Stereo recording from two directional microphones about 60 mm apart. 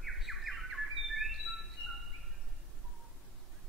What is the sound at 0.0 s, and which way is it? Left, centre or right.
Bird, centre.